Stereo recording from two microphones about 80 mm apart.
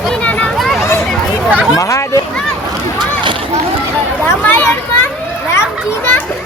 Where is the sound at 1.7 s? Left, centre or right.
Left.